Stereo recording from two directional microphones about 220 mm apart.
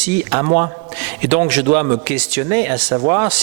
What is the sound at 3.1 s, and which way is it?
Speech, 25° right (ahead or behind).